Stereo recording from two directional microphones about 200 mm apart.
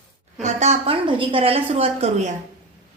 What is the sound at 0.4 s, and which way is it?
A woman's voice, 35° right (ahead or behind).